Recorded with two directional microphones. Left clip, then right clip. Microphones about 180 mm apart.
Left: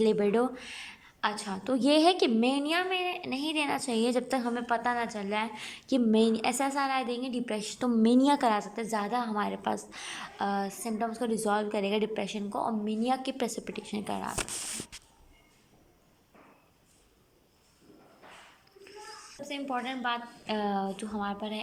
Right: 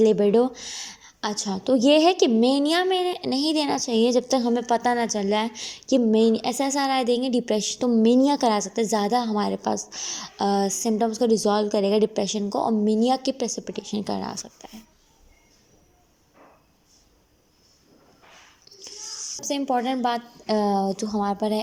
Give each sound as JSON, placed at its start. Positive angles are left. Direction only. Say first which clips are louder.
{"t": 0.0, "sound": "a woman's voice", "louder": "right 8 dB", "side_deg": -15}
{"t": 2.4, "sound": "a woman's voice", "louder": "right 8 dB", "side_deg": -25}
{"t": 5.9, "sound": "a woman's voice", "louder": "right 7 dB", "side_deg": -10}
{"t": 6.6, "sound": "a woman's voice", "louder": "right 6 dB", "side_deg": -30}
{"t": 7.9, "sound": "a woman's voice", "louder": "right 5 dB", "side_deg": -10}
{"t": 8.7, "sound": "a woman's voice", "louder": "right 9 dB", "side_deg": -30}
{"t": 11.4, "sound": "a woman's voice", "louder": "right 8 dB", "side_deg": -20}
{"t": 13.6, "sound": "a woman's voice", "louder": "right 6 dB", "side_deg": -15}
{"t": 19.5, "sound": "a woman's voice", "louder": "right 10 dB", "side_deg": -40}